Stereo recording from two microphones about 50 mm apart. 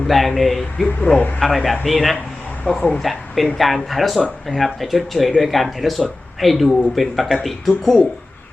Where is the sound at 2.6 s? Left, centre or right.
Left.